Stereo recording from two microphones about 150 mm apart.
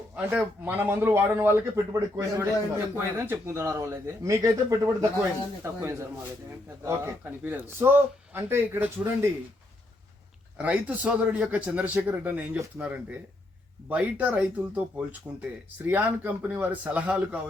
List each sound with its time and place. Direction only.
0.2 s speech: 10° right (ahead or behind)
10.6 s speech: 10° right (ahead or behind)